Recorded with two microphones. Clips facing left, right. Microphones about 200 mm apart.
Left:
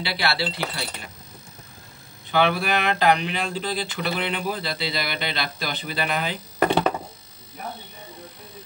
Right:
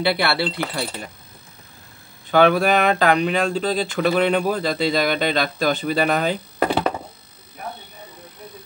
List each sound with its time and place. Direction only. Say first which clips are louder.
0.0 s speech: right 6 dB; 55° right (ahead or behind)
2.3 s speech: right 6 dB; 45° right (ahead or behind)
6.6 s a sound: even; 5° right (ahead or behind)